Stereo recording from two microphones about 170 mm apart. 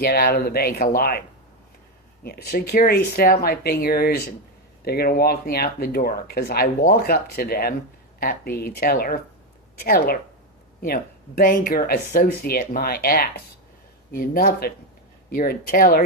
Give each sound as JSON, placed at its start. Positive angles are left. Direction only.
{"t": 0.0, "sound": "speech", "side_deg": 65}
{"t": 2.2, "sound": "speech", "side_deg": 65}